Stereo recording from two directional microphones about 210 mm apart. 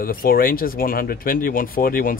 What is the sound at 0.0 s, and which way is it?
Speech, 45° left (ahead or behind).